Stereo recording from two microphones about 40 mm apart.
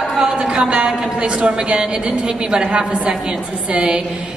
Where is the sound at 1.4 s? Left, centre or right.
Right.